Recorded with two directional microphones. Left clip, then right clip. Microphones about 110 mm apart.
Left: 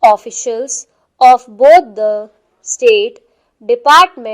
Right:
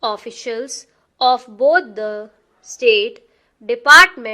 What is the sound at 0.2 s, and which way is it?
A woman's voice, 35° left (ahead or behind).